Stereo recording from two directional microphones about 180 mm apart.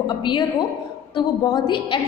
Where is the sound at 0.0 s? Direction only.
25° left (ahead or behind).